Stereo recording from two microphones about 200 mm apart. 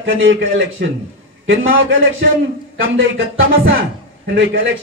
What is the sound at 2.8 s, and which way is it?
A man's voice, 70° right (ahead or behind).